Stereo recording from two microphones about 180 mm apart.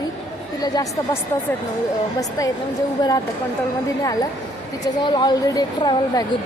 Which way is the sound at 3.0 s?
20° left (ahead or behind).